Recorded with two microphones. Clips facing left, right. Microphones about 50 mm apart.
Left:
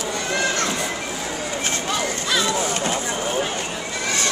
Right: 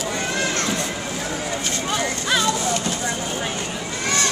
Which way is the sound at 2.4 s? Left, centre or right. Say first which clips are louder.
Even; left.